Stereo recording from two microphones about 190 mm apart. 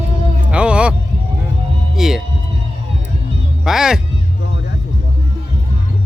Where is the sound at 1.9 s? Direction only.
Centre (ahead or behind).